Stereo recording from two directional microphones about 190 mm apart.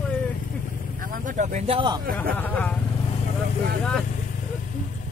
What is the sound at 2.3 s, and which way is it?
Vehicle, 10° left (ahead or behind).